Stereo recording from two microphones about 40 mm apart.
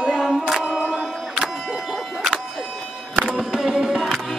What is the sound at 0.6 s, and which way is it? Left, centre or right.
Music, centre.